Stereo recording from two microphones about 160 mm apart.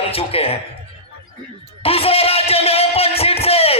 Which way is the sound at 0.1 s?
35° left (ahead or behind).